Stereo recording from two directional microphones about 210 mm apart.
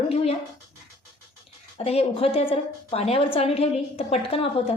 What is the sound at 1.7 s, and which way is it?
A woman's voice, 30° left (ahead or behind).